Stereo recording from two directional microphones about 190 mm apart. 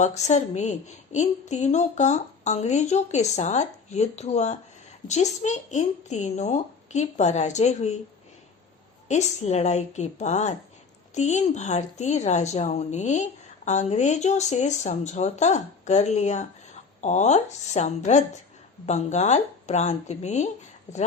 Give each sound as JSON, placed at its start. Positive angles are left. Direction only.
{"t": 0.0, "sound": "a woman's voice", "side_deg": 35}
{"t": 9.0, "sound": "a woman's voice", "side_deg": 35}